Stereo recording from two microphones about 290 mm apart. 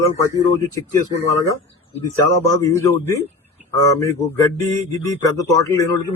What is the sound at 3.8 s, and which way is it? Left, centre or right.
A man's voice, centre.